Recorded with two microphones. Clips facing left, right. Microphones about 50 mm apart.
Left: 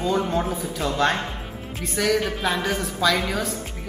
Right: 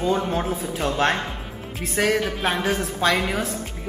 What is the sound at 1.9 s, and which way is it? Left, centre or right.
Speech, right.